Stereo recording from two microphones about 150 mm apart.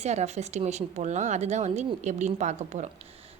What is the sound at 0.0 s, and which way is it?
A woman's voice, 50° right (ahead or behind).